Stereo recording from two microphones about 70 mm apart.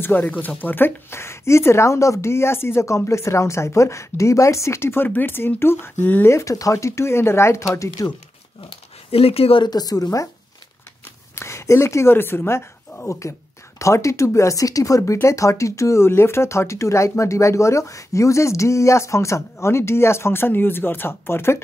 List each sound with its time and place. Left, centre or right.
0.0 s speech: left
6.2 s speech: left
9.6 s a woman's voice: left
11.3 s speech: left